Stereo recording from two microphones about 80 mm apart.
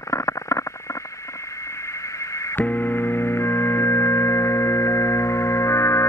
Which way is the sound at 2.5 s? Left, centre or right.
Left.